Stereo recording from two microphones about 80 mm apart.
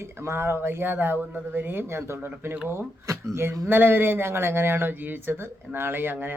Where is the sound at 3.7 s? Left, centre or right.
Right.